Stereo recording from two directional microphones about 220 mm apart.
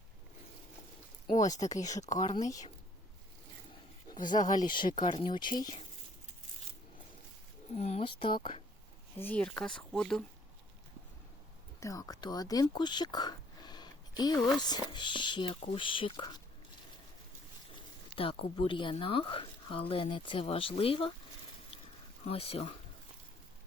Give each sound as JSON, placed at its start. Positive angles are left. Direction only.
{"t": 1.4, "sound": "speech", "side_deg": 15}
{"t": 4.3, "sound": "speech", "side_deg": 20}
{"t": 7.8, "sound": "speech", "side_deg": 30}
{"t": 9.1, "sound": "speech", "side_deg": 10}
{"t": 11.8, "sound": "speech", "side_deg": 15}
{"t": 18.2, "sound": "speech", "side_deg": 25}
{"t": 22.3, "sound": "speech", "side_deg": 25}